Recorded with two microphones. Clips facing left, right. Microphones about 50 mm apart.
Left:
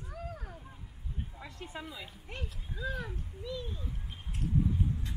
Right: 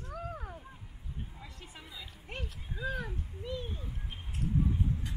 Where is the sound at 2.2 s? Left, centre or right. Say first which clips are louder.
Right 1 dB; centre.